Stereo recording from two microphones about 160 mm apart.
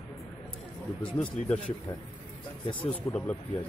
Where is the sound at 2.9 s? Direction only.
15° left (ahead or behind).